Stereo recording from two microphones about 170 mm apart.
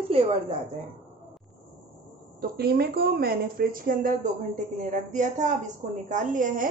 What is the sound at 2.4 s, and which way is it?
A woman's voice, 65° right (ahead or behind).